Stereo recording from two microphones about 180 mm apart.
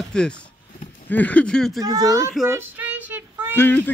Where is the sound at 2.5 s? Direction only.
10° right (ahead or behind).